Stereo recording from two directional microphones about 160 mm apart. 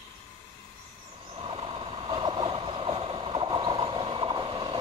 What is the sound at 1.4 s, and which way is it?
Vehicle, 35° right (ahead or behind).